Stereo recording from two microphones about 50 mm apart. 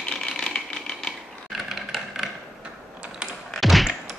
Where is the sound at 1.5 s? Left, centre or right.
Centre.